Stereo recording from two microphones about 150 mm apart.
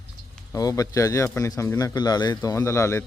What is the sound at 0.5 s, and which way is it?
A man's voice, 25° left (ahead or behind).